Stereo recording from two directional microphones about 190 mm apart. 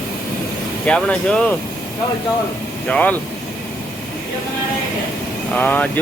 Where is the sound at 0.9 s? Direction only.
5° left (ahead or behind).